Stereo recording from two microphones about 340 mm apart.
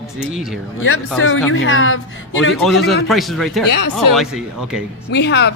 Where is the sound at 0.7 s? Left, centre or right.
Left.